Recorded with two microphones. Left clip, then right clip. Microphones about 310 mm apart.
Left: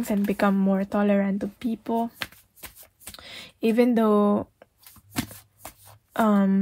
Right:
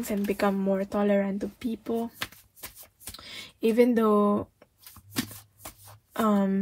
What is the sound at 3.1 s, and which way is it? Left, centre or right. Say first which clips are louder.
Speech: left 1 dB; left.